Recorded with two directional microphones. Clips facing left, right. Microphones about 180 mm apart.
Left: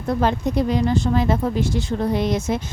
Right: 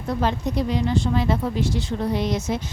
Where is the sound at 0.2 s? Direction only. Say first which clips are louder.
Left 3 dB; 50° left (ahead or behind).